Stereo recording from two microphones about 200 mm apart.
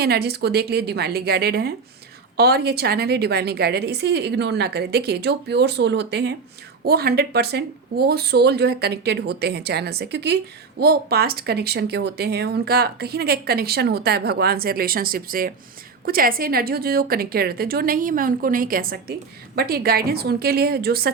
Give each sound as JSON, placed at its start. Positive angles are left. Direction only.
{"t": 0.0, "sound": "a woman's voice", "side_deg": -55}